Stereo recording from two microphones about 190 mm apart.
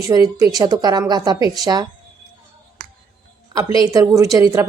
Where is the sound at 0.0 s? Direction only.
20° right (ahead or behind).